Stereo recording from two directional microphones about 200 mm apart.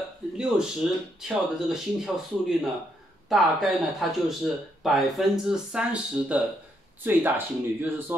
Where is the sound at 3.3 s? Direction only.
Centre (ahead or behind).